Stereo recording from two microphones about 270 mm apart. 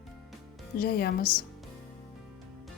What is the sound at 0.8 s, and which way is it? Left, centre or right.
Speech, left.